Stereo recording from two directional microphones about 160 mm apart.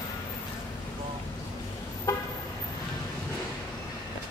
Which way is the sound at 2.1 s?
20° left (ahead or behind).